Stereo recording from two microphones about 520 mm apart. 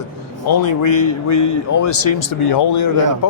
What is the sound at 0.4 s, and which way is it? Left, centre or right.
Speech, left.